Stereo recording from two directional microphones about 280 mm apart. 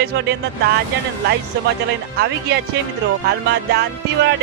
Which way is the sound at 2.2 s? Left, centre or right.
Right.